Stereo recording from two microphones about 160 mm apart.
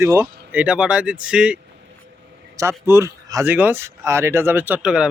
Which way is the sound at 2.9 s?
15° right (ahead or behind).